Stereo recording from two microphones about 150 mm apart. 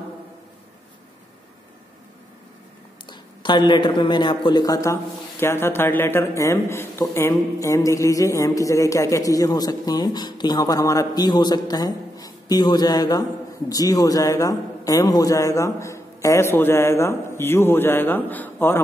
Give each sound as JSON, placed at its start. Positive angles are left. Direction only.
{"t": 3.1, "sound": "a man's voice", "side_deg": 30}